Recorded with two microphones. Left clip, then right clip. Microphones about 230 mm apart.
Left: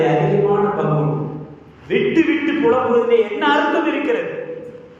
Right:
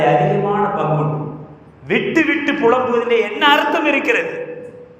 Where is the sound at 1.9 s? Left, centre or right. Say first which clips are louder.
Even; right.